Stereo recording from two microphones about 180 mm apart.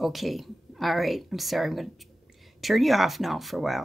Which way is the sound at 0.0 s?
Centre (ahead or behind).